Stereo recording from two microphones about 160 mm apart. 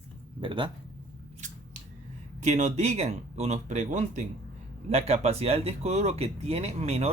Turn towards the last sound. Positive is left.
turn(degrees=-40)  # may be behind; listen again after turning